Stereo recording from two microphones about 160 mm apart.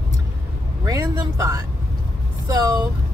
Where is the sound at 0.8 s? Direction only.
20° right (ahead or behind).